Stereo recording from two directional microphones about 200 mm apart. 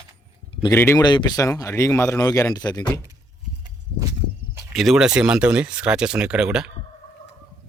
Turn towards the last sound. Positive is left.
turn(degrees=-5)  # may be behind; listen again after turning